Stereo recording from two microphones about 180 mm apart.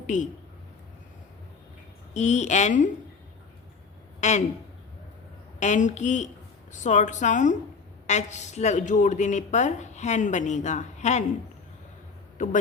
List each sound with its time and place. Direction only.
2.1 s a woman's voice: 40° left (ahead or behind)
4.2 s speech: 40° left (ahead or behind)
5.5 s a woman's voice: 40° left (ahead or behind)